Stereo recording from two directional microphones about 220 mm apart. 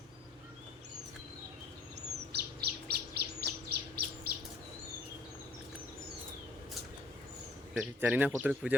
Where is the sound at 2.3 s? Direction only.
45° right (ahead or behind).